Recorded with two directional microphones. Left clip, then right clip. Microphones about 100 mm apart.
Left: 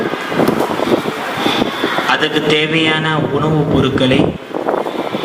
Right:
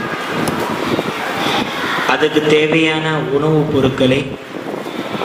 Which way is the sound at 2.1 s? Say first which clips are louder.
Right 2 dB; 50° left (ahead or behind).